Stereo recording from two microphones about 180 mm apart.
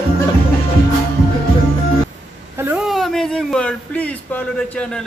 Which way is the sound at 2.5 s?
10° right (ahead or behind).